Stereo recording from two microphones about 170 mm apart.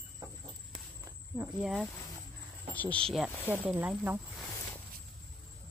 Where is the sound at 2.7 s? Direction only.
10° left (ahead or behind).